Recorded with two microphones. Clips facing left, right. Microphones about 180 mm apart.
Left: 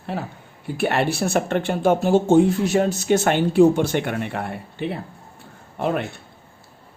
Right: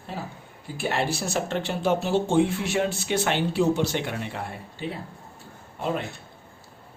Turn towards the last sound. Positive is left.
turn(degrees=65)  # may be behind; listen again after turning